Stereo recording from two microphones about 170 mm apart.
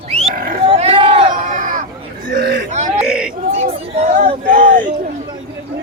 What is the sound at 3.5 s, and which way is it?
Chatter, 40° right (ahead or behind).